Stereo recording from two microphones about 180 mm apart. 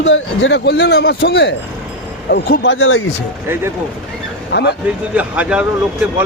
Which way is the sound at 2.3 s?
75° left (ahead or behind).